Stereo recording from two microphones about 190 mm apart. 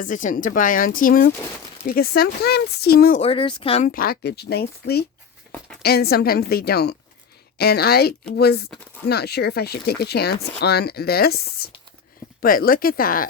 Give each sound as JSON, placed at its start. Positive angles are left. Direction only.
{"t": 0.0, "sound": "speech", "side_deg": 45}
{"t": 3.2, "sound": "speech", "side_deg": 30}
{"t": 3.8, "sound": "speech", "side_deg": 50}